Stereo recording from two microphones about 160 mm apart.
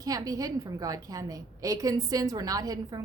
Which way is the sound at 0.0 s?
20° right (ahead or behind).